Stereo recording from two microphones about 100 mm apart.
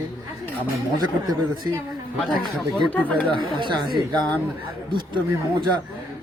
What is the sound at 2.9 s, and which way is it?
Speech, 15° left (ahead or behind).